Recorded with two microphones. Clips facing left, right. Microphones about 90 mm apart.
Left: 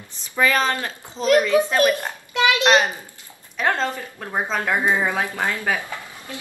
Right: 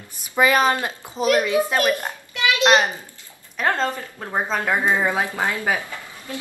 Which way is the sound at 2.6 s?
15° right (ahead or behind).